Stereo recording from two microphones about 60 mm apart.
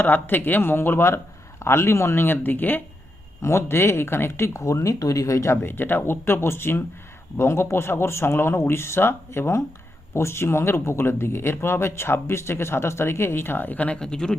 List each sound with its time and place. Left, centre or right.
0.0 s a man's voice: left
3.4 s speech: left
5.6 s a man's voice: left
13.7 s speech: centre